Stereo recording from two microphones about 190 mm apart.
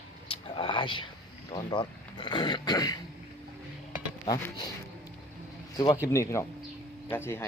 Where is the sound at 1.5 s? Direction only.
25° left (ahead or behind).